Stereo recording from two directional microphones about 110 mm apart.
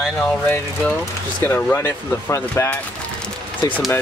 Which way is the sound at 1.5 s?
20° left (ahead or behind).